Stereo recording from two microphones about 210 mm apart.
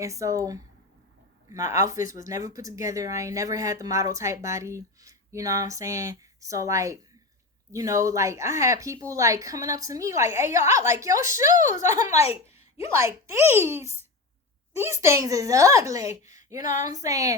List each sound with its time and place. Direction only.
0.0 s speech: 15° right (ahead or behind)
15.0 s speech: 15° right (ahead or behind)